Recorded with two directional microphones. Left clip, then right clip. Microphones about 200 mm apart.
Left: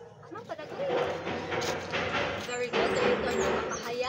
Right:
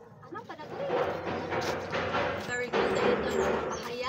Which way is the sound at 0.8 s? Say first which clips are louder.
Even; 30° right (ahead or behind).